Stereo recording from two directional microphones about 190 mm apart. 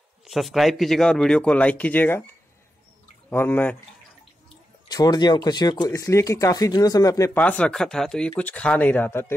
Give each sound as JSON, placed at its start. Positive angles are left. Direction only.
{"t": 0.2, "sound": "speech", "side_deg": 0}
{"t": 3.3, "sound": "speech", "side_deg": 10}
{"t": 4.8, "sound": "speech", "side_deg": 20}